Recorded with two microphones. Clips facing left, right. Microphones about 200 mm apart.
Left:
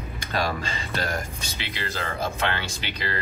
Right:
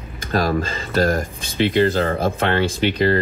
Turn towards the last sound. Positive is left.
turn(degrees=-50)  # may be behind; listen again after turning